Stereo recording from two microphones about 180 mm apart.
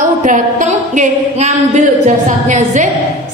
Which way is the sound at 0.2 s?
45° right (ahead or behind).